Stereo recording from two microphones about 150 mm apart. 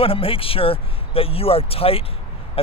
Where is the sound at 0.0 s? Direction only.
40° left (ahead or behind).